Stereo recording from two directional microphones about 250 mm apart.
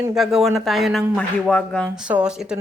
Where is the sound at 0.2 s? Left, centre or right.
Centre.